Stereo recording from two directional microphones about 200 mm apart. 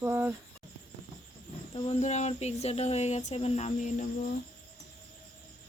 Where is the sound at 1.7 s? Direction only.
35° left (ahead or behind).